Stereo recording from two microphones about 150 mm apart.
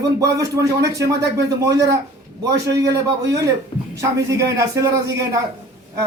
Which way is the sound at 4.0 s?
20° right (ahead or behind).